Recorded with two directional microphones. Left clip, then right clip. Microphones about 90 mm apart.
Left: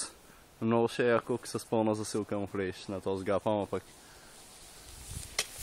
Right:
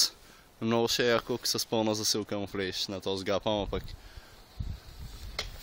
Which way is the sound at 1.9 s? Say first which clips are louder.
Right 3 dB; 5° right (ahead or behind).